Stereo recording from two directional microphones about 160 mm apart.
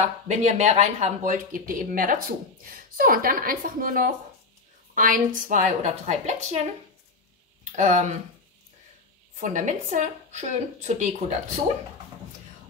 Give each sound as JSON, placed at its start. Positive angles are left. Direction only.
{"t": 0.3, "sound": "a woman's voice", "side_deg": -45}
{"t": 7.7, "sound": "a woman's voice", "side_deg": -50}
{"t": 9.4, "sound": "a woman's voice", "side_deg": -50}